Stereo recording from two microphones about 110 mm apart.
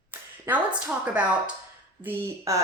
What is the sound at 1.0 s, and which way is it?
Speech, 10° right (ahead or behind).